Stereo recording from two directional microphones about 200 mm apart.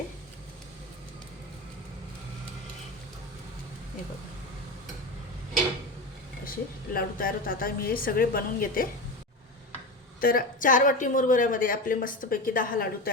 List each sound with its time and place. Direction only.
6.9 s a woman's voice: 45° left (ahead or behind)
10.2 s a woman's voice: 45° left (ahead or behind)